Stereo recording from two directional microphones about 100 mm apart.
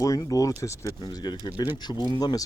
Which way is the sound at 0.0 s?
35° left (ahead or behind).